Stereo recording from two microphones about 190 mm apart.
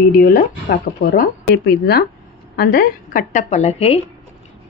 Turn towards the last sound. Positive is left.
turn(degrees=35)  # may be behind; listen again after turning